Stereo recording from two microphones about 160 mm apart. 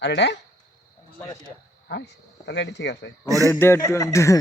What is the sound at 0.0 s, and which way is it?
Speech, 90° left.